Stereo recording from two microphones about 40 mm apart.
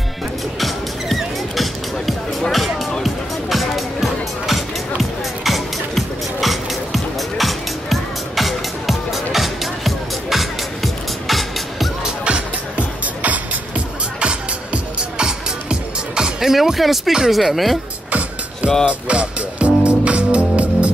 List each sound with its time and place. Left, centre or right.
0.6 s music: centre
12.0 s music: right
14.2 s music: right; by 17.1 s centre
17.3 s speech: centre
18.9 s music: right